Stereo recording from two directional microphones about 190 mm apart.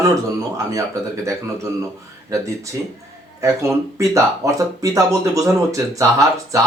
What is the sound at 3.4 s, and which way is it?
Speech, 15° right (ahead or behind).